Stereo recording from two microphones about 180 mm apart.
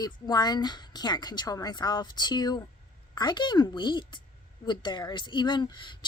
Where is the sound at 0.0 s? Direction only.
20° left (ahead or behind).